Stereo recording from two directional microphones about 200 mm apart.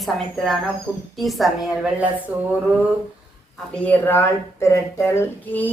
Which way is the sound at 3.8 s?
10° left (ahead or behind).